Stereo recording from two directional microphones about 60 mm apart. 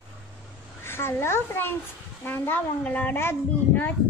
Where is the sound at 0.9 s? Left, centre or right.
Left.